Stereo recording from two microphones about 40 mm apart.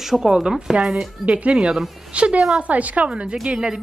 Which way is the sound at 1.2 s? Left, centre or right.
Right.